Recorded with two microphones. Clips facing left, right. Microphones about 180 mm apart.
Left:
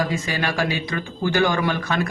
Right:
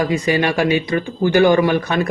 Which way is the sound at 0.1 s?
20° right (ahead or behind).